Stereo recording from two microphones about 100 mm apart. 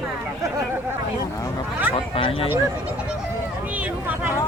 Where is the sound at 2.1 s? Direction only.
70° left (ahead or behind).